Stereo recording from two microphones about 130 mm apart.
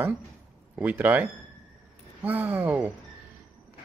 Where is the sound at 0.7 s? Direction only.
15° right (ahead or behind).